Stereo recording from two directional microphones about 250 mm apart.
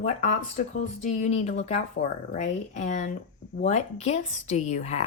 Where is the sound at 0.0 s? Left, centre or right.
Left.